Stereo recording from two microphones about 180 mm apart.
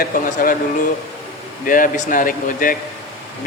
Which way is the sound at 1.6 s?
50° left (ahead or behind).